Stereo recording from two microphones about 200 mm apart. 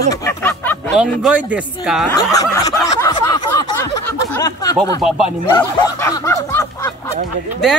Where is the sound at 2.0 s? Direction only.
15° left (ahead or behind).